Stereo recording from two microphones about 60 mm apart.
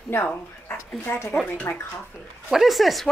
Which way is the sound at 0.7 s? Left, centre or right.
Left.